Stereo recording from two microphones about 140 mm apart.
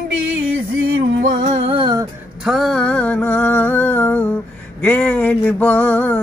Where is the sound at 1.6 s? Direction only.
40° right (ahead or behind).